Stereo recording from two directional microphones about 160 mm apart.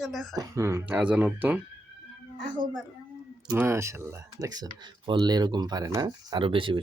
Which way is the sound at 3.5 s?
10° right (ahead or behind).